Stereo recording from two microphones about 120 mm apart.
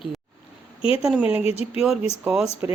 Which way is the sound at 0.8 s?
50° left (ahead or behind).